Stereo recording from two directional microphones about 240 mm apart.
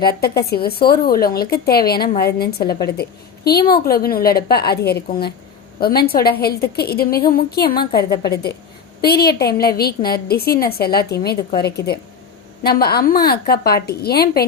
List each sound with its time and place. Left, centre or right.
0.5 s a woman's voice: left
9.0 s a woman's voice: left